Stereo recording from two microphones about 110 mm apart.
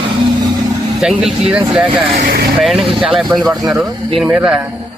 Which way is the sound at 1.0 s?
5° right (ahead or behind).